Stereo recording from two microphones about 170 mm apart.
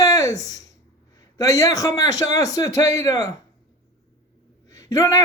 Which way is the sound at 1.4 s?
20° left (ahead or behind).